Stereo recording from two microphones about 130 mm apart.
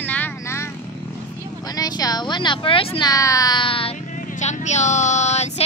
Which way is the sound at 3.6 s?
45° left (ahead or behind).